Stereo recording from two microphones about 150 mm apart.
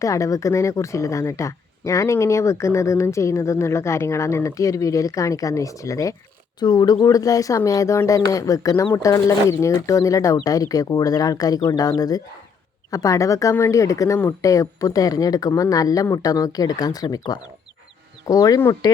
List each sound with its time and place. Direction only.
0.0 s speech: 20° left (ahead or behind)